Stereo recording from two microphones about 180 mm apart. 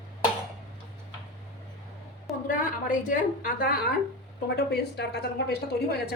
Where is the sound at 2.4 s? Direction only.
50° left (ahead or behind).